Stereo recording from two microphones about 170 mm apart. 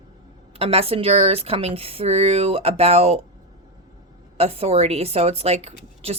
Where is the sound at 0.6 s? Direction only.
35° right (ahead or behind).